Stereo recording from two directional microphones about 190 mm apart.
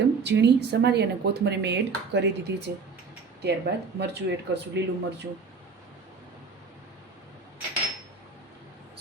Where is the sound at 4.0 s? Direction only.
65° right (ahead or behind).